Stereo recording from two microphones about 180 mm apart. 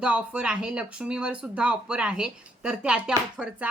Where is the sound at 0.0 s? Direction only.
5° right (ahead or behind).